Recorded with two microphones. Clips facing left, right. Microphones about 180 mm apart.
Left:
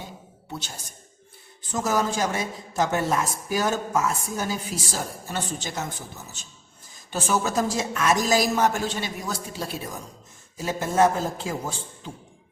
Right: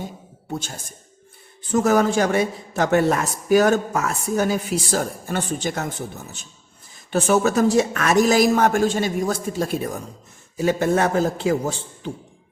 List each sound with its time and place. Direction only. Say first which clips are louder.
0.5 s speech: right 7 dB; 50° right (ahead or behind)
1.7 s a woman's voice: right 7 dB; 60° right (ahead or behind)
10.6 s a woman's voice: right 3 dB; 65° right (ahead or behind)